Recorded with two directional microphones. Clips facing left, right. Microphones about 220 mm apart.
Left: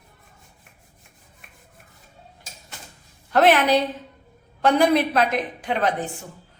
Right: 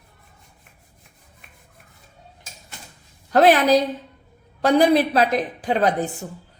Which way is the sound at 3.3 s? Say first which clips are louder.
Right 2 dB; 35° right (ahead or behind).